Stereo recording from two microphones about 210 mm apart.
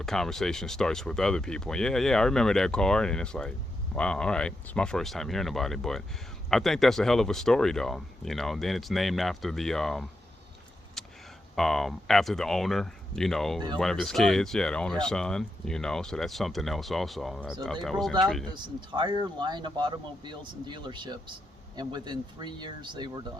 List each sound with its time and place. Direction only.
0.0 s speech: centre (ahead or behind)
11.0 s a sound: centre (ahead or behind)
11.5 s speech: centre (ahead or behind)
18.5 s speech: 20° right (ahead or behind)